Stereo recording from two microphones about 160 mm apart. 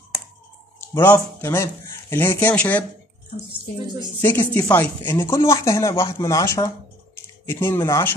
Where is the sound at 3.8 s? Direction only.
25° right (ahead or behind).